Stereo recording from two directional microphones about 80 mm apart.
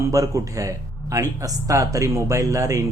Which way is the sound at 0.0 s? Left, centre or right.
Right.